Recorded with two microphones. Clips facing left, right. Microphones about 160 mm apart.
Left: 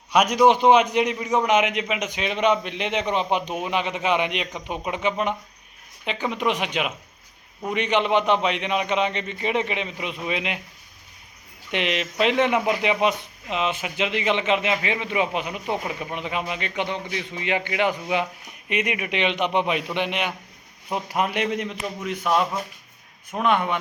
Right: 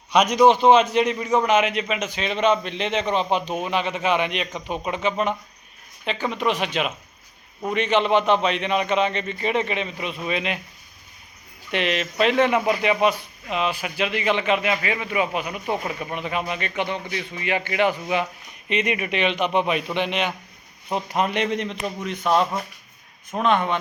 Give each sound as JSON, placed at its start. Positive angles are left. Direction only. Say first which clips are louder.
{"t": 0.1, "sound": "a man's voice", "louder": "right 1 dB", "side_deg": 10}
{"t": 11.7, "sound": "a man's voice", "louder": "right 1 dB", "side_deg": 15}